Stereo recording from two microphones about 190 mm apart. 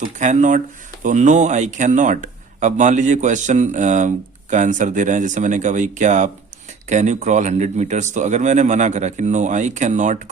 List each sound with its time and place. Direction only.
0.0 s speech: 40° right (ahead or behind)